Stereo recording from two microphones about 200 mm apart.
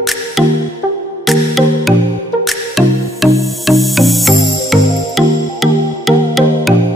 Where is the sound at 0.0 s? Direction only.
Centre (ahead or behind).